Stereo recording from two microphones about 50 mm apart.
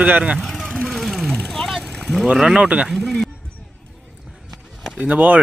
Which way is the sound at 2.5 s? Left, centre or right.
Right.